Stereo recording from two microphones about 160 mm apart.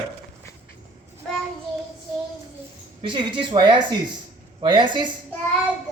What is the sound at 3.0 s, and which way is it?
Speech, 30° right (ahead or behind).